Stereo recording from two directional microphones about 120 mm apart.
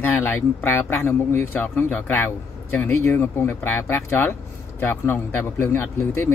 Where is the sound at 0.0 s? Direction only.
15° left (ahead or behind).